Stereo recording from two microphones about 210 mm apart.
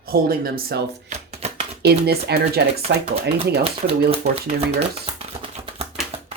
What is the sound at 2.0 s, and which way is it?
Speech, 50° right (ahead or behind).